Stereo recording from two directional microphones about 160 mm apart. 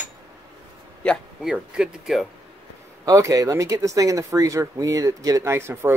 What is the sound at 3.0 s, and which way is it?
Speech, 20° right (ahead or behind).